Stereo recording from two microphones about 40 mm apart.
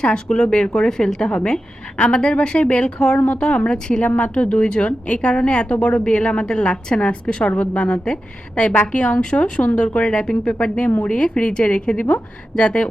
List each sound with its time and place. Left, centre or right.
0.0 s a woman's voice: left